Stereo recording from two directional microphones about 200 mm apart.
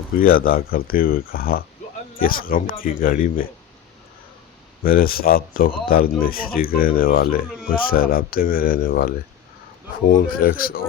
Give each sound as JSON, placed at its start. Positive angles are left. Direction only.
{"t": 0.3, "sound": "speech", "side_deg": 45}
{"t": 4.8, "sound": "speech", "side_deg": 45}